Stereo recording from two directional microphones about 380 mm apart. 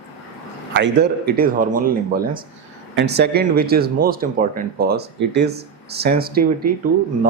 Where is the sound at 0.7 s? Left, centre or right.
Right.